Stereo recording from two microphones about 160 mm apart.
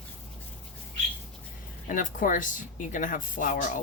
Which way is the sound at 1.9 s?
55° left (ahead or behind).